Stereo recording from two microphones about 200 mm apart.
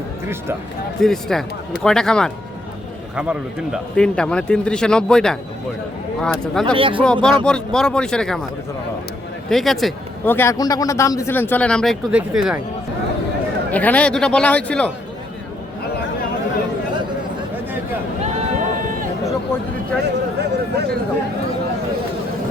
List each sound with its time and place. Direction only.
1.0 s a man's voice: centre (ahead or behind)
6.7 s speech: 25° right (ahead or behind)
7.0 s a man's voice: 5° left (ahead or behind)
9.5 s a man's voice: centre (ahead or behind)
13.7 s a man's voice: 10° left (ahead or behind)
18.2 s a sound: 40° right (ahead or behind)
20.0 s a sound: 55° right (ahead or behind)